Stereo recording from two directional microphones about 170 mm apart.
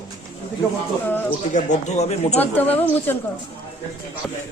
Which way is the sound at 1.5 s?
45° left (ahead or behind).